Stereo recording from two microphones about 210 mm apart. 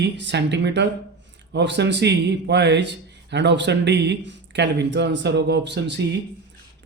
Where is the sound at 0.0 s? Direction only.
55° right (ahead or behind).